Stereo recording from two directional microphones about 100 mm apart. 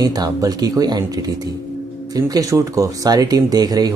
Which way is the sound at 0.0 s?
40° right (ahead or behind).